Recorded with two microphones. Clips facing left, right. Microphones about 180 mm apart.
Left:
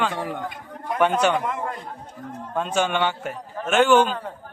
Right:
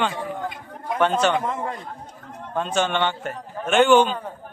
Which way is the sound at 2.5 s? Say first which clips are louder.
Even; 5° left (ahead or behind).